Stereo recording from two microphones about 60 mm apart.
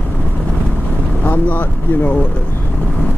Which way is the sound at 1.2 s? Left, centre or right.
Left.